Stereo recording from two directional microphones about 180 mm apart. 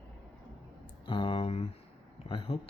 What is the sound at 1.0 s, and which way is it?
Speech, 30° left (ahead or behind).